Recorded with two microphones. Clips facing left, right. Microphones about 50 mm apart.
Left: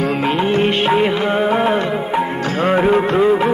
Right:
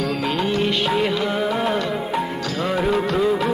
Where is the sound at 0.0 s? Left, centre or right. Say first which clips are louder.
Left 5 dB; left.